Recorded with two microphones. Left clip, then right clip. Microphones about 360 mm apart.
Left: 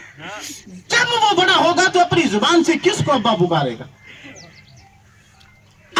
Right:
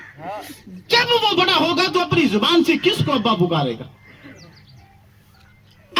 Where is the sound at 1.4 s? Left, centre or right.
Left.